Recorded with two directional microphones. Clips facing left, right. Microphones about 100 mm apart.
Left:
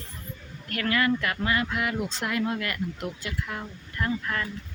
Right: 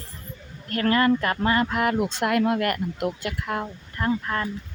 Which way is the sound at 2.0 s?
60° right (ahead or behind).